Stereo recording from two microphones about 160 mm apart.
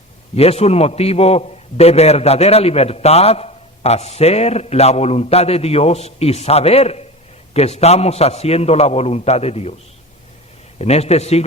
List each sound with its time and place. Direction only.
0.3 s a man's voice: 40° left (ahead or behind)
10.8 s a man's voice: 40° left (ahead or behind)